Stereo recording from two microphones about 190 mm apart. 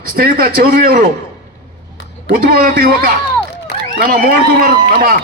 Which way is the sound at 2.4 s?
50° right (ahead or behind).